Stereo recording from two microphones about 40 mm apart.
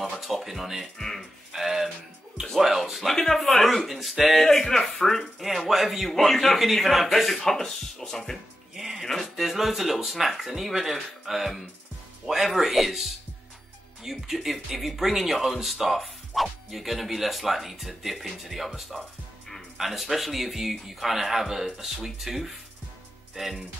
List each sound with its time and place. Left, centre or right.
0.0 s speech: centre
0.9 s speech: centre
1.5 s music: centre
2.5 s speech: centre
3.2 s speech: centre
5.7 s speech: centre
8.7 s music: centre
9.2 s speech: centre
14.0 s speech: centre